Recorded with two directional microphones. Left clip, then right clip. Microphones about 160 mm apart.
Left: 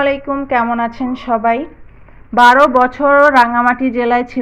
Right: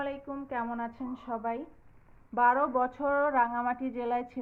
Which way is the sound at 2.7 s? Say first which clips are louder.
Left 18 dB; 5° left (ahead or behind).